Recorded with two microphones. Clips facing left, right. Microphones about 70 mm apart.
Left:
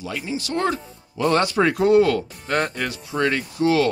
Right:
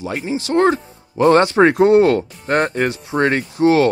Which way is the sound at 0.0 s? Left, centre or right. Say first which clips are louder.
Right 5 dB; right.